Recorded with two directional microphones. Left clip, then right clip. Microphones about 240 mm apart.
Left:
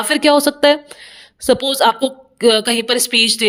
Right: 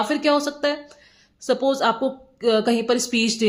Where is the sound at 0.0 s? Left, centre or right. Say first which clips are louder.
Left 7 dB; left.